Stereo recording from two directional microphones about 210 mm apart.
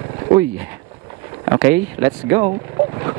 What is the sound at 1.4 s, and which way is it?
Speech, 20° right (ahead or behind).